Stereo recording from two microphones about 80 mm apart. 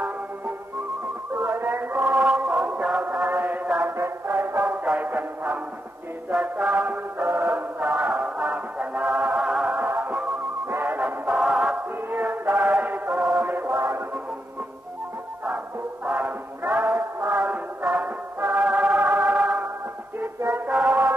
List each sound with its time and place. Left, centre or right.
1.3 s music: right; by 3.3 s centre
3.3 s mantra: right
3.9 s music: right; by 9.8 s centre
9.8 s music: right
11.3 s music: centre
12.1 s music: right
13.4 s music: right
16.1 s a sound: right
17.3 s music: centre
20.7 s music: centre